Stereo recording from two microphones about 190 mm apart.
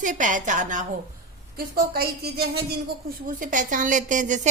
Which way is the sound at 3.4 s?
45° right (ahead or behind).